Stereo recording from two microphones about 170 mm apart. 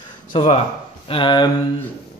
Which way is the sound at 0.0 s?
30° left (ahead or behind).